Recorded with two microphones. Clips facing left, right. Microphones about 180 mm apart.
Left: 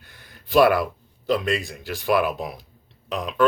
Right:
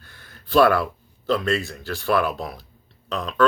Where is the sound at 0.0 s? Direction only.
15° left (ahead or behind).